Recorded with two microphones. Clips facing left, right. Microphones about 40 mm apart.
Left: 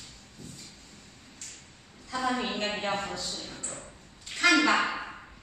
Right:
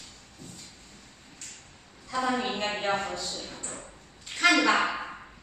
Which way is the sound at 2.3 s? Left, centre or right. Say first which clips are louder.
Right 1 dB; centre.